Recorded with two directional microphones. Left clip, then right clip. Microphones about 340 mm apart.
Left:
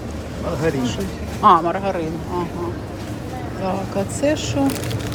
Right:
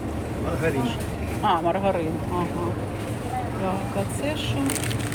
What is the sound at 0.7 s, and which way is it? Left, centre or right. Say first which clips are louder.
Speech: left 4 dB; left.